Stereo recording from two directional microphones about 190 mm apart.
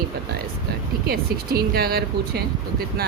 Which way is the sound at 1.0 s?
55° right (ahead or behind).